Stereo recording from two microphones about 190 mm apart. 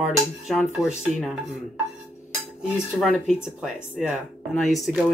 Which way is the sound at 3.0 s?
Centre (ahead or behind).